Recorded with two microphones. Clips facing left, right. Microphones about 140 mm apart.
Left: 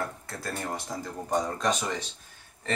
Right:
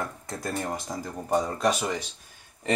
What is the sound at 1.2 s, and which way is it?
Speech, 10° right (ahead or behind).